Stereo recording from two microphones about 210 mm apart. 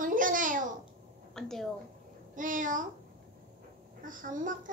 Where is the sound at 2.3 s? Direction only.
40° right (ahead or behind).